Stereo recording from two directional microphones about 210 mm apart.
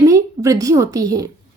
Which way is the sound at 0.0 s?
15° right (ahead or behind).